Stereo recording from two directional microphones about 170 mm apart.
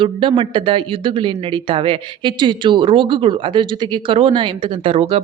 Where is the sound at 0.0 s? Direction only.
30° right (ahead or behind).